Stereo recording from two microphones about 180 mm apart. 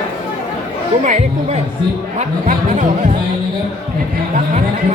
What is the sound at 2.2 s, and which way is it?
Speech, 45° right (ahead or behind).